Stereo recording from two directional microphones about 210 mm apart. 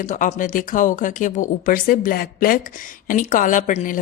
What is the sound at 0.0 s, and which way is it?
A woman's voice, 35° left (ahead or behind).